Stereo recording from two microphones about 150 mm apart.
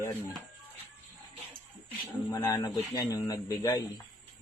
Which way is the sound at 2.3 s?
25° left (ahead or behind).